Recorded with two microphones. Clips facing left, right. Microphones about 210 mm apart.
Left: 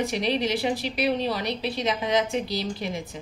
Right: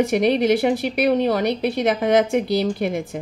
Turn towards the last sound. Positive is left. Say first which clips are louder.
# right 9 dB
turn(degrees=-60)  # may be behind; listen again after turning